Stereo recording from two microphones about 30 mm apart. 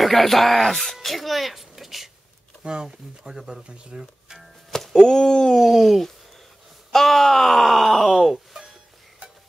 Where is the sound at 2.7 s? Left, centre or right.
Right.